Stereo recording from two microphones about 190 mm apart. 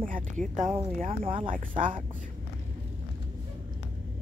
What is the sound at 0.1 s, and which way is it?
Speech, 40° right (ahead or behind).